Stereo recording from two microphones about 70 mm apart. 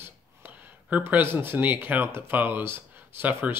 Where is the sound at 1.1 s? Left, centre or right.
Right.